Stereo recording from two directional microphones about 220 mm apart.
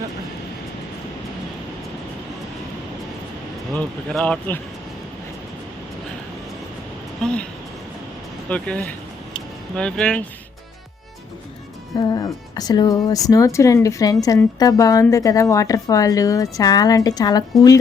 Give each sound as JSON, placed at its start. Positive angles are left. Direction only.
{"t": 3.8, "sound": "speech", "side_deg": 5}
{"t": 7.2, "sound": "speech", "side_deg": 5}
{"t": 8.4, "sound": "speech", "side_deg": 5}
{"t": 11.9, "sound": "speech", "side_deg": 15}